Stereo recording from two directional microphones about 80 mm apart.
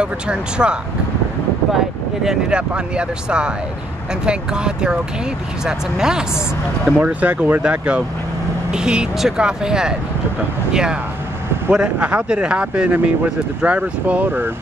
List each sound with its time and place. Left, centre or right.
0.0 s speech: centre
2.2 s speech: centre